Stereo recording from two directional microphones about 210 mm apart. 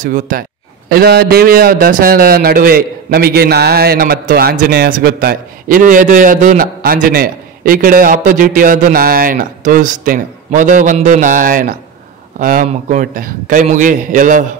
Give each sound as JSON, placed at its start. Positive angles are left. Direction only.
{"t": 0.0, "sound": "a man's voice", "side_deg": -40}